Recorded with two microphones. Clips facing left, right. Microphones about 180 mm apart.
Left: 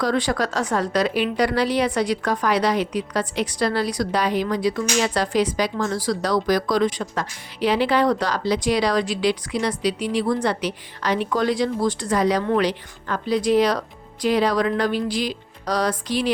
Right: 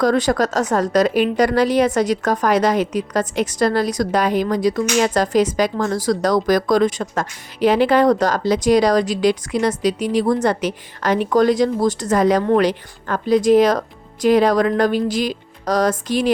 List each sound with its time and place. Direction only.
0.0 s a woman's voice: 45° right (ahead or behind)